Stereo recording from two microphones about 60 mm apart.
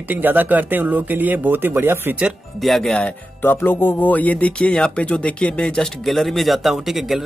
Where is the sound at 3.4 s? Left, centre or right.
Left.